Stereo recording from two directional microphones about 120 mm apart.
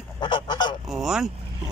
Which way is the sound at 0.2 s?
40° left (ahead or behind).